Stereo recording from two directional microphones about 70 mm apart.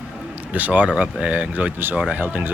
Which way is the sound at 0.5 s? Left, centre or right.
Right.